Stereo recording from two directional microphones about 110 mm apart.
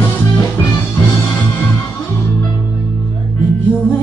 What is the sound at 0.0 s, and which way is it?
Music, 20° left (ahead or behind).